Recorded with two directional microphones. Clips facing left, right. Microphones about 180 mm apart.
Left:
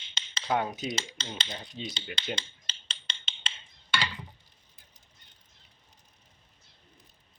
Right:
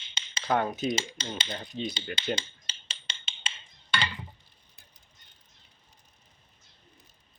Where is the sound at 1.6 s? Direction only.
55° right (ahead or behind).